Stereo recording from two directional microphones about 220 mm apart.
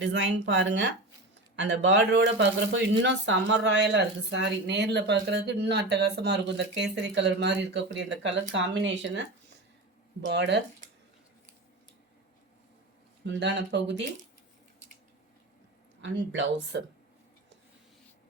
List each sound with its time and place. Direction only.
0.0 s a woman's voice: 50° right (ahead or behind)
13.2 s a woman's voice: 50° right (ahead or behind)
16.0 s a woman's voice: 55° right (ahead or behind)